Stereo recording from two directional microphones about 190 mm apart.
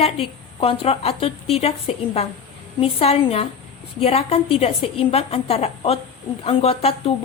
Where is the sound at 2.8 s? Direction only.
30° left (ahead or behind).